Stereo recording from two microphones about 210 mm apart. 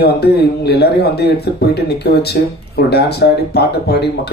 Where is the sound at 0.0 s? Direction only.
50° left (ahead or behind).